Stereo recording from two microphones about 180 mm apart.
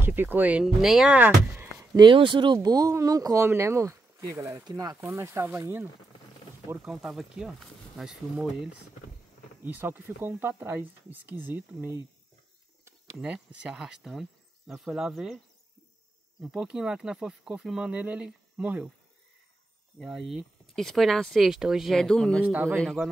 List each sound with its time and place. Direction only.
0.0 s speech: 10° right (ahead or behind)
2.0 s speech: 25° right (ahead or behind)
6.7 s speech: 5° right (ahead or behind)
9.7 s speech: 10° right (ahead or behind)
13.2 s speech: 5° right (ahead or behind)
20.0 s speech: centre (ahead or behind)
22.4 s speech: 10° right (ahead or behind)
22.8 s speech: centre (ahead or behind)